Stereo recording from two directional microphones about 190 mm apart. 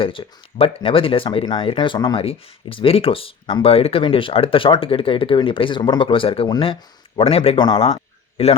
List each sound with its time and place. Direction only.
0.0 s speech: 30° left (ahead or behind)